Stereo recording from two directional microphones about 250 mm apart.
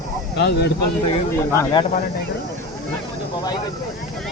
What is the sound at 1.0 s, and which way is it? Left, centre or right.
Speech, centre.